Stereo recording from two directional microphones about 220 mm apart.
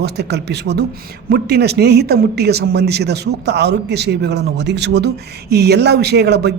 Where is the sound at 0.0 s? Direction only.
50° right (ahead or behind).